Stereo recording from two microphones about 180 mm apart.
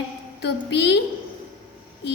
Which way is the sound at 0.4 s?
70° left (ahead or behind).